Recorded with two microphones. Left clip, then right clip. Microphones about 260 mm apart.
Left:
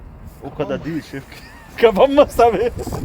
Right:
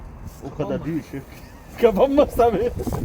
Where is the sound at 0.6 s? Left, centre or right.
Left.